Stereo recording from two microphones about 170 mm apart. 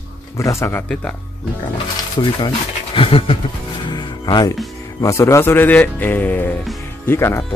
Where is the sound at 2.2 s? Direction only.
25° left (ahead or behind).